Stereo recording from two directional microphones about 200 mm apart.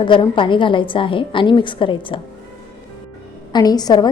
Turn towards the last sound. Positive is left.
turn(degrees=20)  # may be behind; listen again after turning